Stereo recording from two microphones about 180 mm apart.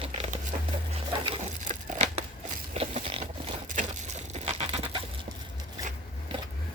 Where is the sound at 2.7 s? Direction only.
35° right (ahead or behind).